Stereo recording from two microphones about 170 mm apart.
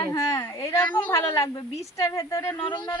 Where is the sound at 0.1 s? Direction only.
20° left (ahead or behind).